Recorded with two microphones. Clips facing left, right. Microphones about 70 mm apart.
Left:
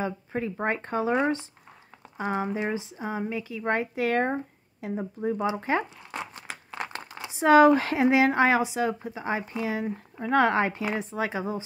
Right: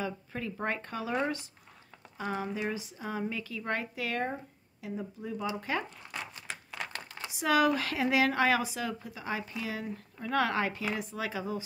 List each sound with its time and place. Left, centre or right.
0.0 s speech: left